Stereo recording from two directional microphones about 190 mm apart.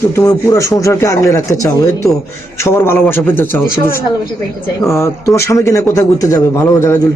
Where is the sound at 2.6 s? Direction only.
15° left (ahead or behind).